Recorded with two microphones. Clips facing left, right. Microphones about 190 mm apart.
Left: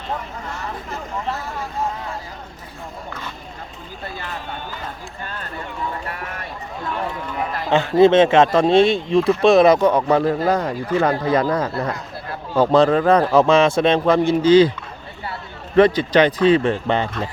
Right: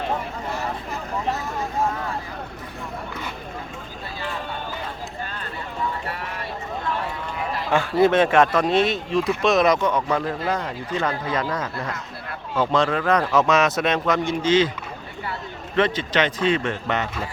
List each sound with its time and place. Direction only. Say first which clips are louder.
7.7 s speech: left 5 dB; 25° left (ahead or behind)
15.7 s speech: left 8 dB; 35° left (ahead or behind)